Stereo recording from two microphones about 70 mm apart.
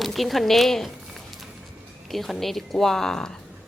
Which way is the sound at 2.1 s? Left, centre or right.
Centre.